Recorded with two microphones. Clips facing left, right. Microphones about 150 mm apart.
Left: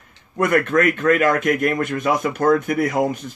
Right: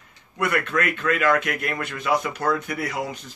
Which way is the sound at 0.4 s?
45° left (ahead or behind).